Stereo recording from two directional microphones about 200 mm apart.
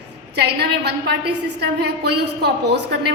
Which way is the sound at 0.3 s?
55° right (ahead or behind).